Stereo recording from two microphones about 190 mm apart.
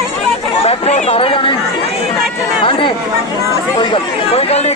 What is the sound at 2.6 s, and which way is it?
Speech, 25° left (ahead or behind).